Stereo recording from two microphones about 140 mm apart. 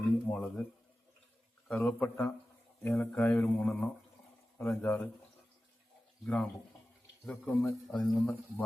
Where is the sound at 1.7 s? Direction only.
10° left (ahead or behind).